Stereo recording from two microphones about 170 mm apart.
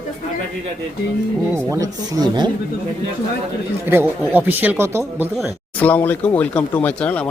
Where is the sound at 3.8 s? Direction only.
10° right (ahead or behind).